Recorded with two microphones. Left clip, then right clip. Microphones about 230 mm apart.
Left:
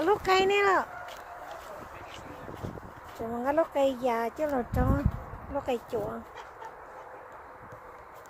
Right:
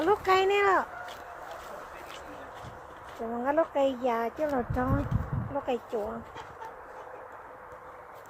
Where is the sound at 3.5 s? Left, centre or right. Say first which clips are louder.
Even; centre.